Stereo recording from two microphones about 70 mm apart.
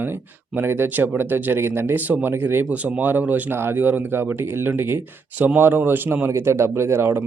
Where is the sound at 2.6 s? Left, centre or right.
Centre.